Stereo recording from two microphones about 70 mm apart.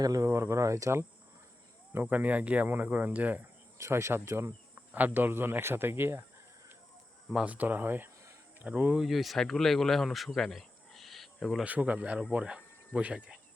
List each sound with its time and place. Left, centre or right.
0.0 s speech: right
0.3 s speech: right
1.9 s speech: right
3.8 s speech: right
4.9 s speech: right
7.3 s speech: right
9.0 s speech: centre
11.6 s speech: centre